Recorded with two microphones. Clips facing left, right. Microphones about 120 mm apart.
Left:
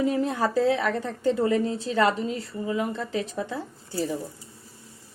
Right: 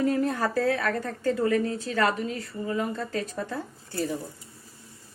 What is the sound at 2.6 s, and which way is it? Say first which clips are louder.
A woman's voice: left 1 dB; 15° left (ahead or behind).